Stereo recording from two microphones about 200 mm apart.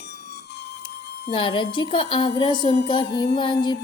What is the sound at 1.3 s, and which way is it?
A woman's voice, 25° left (ahead or behind).